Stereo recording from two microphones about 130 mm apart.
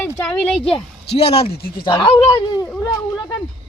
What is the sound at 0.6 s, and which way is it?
Speech, 50° left (ahead or behind).